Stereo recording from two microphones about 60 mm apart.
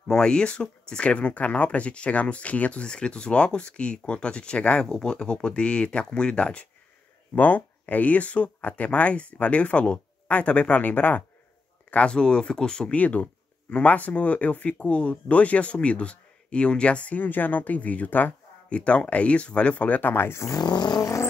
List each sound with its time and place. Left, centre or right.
0.1 s speech: centre; by 11.2 s left
11.9 s speech: centre
12.9 s speech: left
20.5 s a sound: left